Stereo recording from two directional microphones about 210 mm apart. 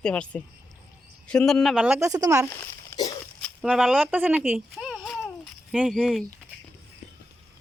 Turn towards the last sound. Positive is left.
turn(degrees=0)  # may be behind; listen again after turning